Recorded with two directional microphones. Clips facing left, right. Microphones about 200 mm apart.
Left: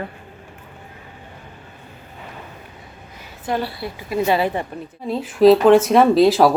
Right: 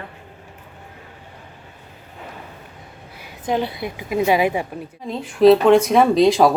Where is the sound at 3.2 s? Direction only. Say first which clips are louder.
Right 2 dB; 15° right (ahead or behind).